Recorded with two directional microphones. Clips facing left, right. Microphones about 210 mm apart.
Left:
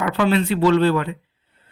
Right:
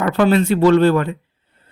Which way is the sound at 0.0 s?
45° right (ahead or behind).